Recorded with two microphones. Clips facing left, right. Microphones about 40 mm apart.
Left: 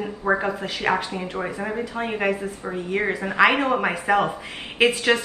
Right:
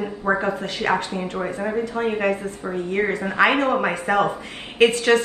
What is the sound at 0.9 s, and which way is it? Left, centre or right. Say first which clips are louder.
A woman's voice: right 1 dB; centre.